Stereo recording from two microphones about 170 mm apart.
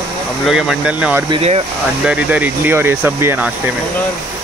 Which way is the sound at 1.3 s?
35° right (ahead or behind).